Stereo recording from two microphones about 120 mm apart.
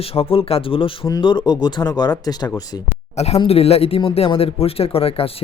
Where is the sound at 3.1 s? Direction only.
60° left (ahead or behind).